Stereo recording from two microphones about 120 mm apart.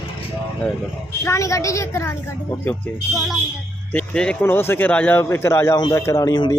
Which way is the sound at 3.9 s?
10° left (ahead or behind).